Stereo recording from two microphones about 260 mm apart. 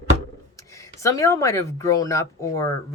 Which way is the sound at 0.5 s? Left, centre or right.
Centre.